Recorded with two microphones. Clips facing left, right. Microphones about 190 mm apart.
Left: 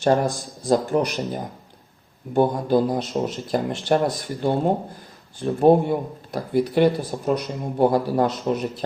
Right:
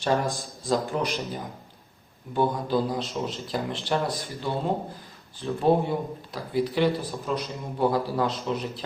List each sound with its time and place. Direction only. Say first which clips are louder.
0.0 s speech: left 6 dB; 45° left (ahead or behind)